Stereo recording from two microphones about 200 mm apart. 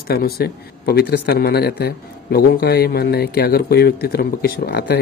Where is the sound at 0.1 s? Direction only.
50° left (ahead or behind).